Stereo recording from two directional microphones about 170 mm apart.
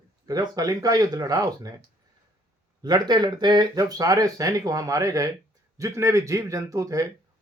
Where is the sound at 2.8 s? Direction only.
25° right (ahead or behind).